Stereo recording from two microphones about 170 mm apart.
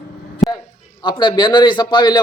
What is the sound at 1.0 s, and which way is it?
A man's voice, 25° left (ahead or behind).